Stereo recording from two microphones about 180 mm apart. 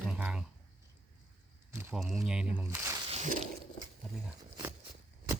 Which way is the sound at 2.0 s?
Centre (ahead or behind).